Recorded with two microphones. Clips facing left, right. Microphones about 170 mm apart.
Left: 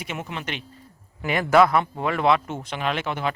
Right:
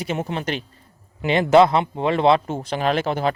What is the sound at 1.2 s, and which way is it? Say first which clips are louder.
Speech: right 4 dB; 25° right (ahead or behind).